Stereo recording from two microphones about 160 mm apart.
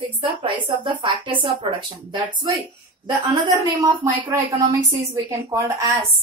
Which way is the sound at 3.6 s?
15° right (ahead or behind).